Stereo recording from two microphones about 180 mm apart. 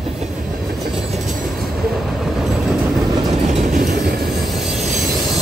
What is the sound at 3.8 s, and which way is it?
Train, 55° right (ahead or behind).